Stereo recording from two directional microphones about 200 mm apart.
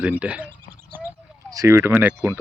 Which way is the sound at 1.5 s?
15° right (ahead or behind).